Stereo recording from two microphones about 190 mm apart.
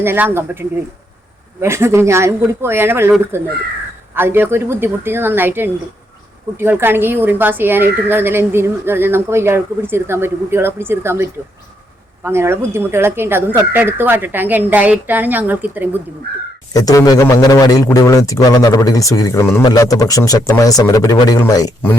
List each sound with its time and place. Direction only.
0.0 s speech: 10° right (ahead or behind)
16.7 s a man's voice: 20° left (ahead or behind)